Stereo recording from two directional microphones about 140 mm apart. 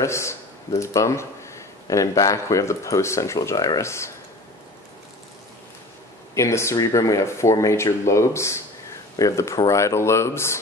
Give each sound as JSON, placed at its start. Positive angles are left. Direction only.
{"t": 0.0, "sound": "speech", "side_deg": 20}
{"t": 6.3, "sound": "speech", "side_deg": 20}